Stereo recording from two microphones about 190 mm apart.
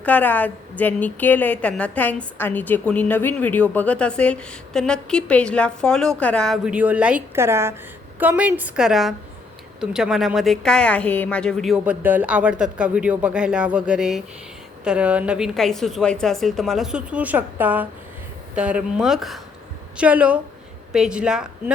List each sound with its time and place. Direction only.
0.0 s a woman's voice: 10° left (ahead or behind)